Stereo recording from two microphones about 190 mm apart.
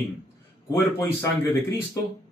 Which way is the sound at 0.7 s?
15° left (ahead or behind).